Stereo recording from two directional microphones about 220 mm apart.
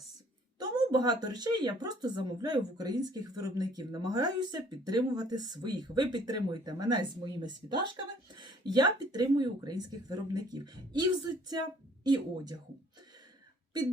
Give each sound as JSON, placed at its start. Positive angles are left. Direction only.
{"t": 0.6, "sound": "speech", "side_deg": -15}
{"t": 12.0, "sound": "speech", "side_deg": -20}